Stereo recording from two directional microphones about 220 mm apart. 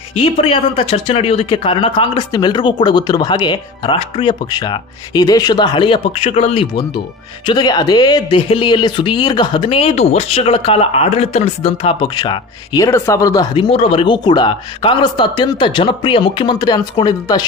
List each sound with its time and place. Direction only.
0.1 s speech: 25° left (ahead or behind)